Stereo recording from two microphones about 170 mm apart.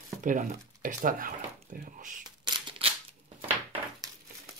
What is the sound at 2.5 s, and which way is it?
Scissors, 30° right (ahead or behind).